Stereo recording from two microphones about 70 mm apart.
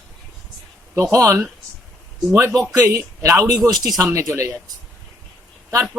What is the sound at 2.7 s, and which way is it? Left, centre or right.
Speech, right.